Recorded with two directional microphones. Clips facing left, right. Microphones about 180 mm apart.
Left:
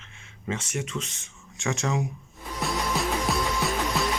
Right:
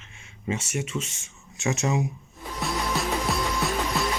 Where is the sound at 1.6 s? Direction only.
20° right (ahead or behind).